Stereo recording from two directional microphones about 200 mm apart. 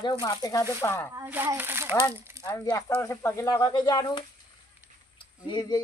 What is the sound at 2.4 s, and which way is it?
Speech, 15° left (ahead or behind).